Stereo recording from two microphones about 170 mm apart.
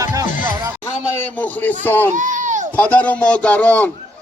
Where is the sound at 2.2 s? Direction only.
45° right (ahead or behind).